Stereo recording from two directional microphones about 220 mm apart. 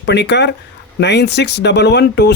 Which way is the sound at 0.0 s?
50° left (ahead or behind).